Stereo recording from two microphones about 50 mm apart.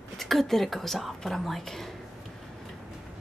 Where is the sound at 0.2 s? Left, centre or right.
Centre.